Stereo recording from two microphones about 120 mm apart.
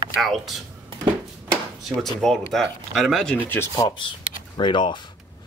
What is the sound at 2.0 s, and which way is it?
Speech, centre (ahead or behind).